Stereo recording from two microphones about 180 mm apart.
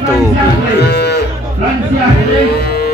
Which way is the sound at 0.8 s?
65° left (ahead or behind).